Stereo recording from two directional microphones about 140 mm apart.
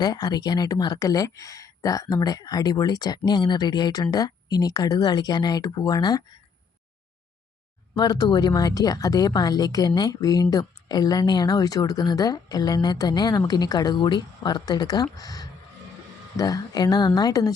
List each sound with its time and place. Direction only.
0.0 s speech: 25° left (ahead or behind)
7.9 s speech: 30° left (ahead or behind)